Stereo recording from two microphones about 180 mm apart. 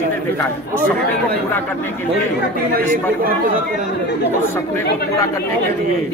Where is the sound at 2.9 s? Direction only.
50° right (ahead or behind).